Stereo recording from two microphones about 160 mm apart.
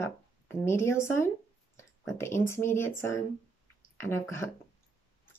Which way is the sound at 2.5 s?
15° left (ahead or behind).